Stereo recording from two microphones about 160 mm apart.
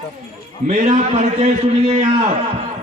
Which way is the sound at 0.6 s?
50° right (ahead or behind).